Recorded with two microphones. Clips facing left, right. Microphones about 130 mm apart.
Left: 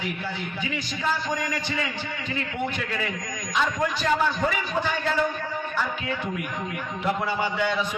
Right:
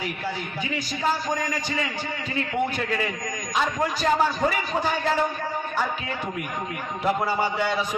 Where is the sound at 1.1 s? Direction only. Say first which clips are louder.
Right 1 dB; 40° right (ahead or behind).